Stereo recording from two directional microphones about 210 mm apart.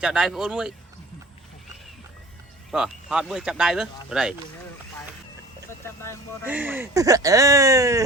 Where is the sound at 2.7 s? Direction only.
Centre (ahead or behind).